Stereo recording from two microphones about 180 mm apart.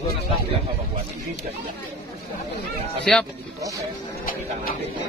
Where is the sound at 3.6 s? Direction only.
20° right (ahead or behind).